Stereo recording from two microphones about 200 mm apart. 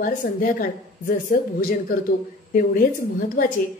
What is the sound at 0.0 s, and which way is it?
A woman's voice, 45° left (ahead or behind).